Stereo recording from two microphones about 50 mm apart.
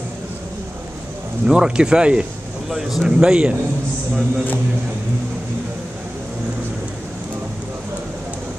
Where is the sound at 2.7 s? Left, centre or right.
Centre.